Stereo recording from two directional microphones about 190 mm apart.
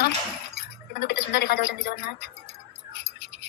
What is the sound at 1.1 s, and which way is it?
Speech, 60° left (ahead or behind).